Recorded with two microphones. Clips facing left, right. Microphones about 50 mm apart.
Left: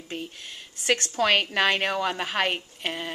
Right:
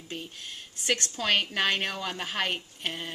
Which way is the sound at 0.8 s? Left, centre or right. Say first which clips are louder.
Left 5 dB; left.